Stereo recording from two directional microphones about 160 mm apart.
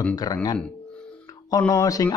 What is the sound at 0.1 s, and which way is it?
Speech, 25° left (ahead or behind).